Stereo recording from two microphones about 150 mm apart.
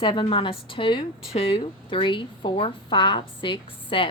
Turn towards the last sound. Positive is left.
turn(degrees=35)  # may be behind; listen again after turning